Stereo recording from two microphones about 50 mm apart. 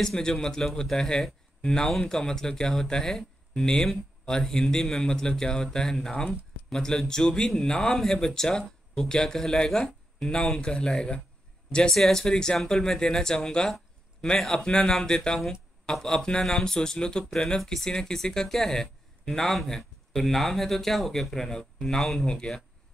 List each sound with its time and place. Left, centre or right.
0.0 s speech: centre
22.2 s speech: centre